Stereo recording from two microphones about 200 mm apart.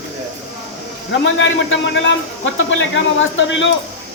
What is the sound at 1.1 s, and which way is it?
A man's voice, 70° left (ahead or behind).